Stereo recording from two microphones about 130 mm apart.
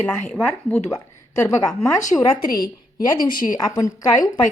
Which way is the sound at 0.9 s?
25° left (ahead or behind).